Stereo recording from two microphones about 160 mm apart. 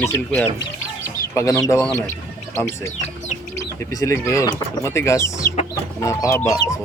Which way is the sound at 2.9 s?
45° left (ahead or behind).